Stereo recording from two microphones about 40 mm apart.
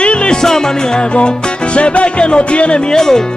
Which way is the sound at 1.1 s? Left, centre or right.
Left.